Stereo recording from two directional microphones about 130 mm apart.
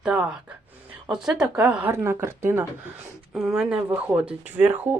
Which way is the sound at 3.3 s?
5° right (ahead or behind).